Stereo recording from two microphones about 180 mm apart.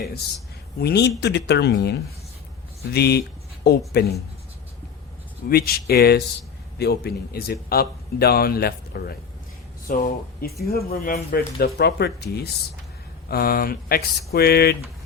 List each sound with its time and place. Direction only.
0.8 s a man's voice: 65° left (ahead or behind)
5.5 s a man's voice: 60° left (ahead or behind)